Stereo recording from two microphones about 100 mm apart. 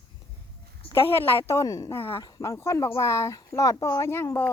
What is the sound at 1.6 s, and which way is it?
Speech, 35° left (ahead or behind).